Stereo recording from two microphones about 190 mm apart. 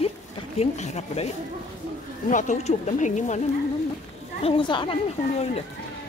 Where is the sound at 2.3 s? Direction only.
40° left (ahead or behind).